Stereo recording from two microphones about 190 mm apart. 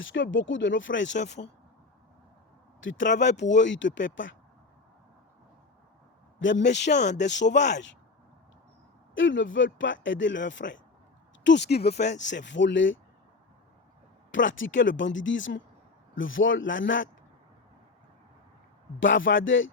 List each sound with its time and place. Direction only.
0.0 s speech: 75° left (ahead or behind)
2.8 s speech: 70° left (ahead or behind)
6.4 s speech: 70° left (ahead or behind)
9.1 s speech: 75° left (ahead or behind)
14.3 s speech: 80° left
16.1 s a man's voice: 90° left
18.9 s a man's voice: 80° left